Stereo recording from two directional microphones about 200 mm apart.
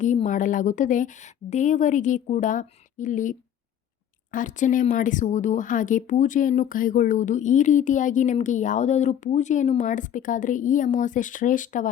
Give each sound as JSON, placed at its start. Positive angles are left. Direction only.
{"t": 0.0, "sound": "speech", "side_deg": 40}